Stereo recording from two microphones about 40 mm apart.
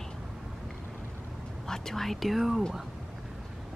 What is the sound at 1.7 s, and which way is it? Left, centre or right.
Speech, centre.